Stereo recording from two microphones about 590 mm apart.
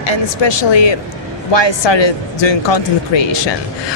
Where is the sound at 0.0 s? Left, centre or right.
Left.